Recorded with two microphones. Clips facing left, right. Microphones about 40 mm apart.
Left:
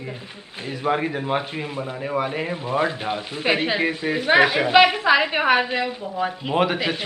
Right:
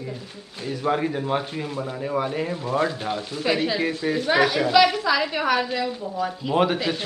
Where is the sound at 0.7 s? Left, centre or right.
Left.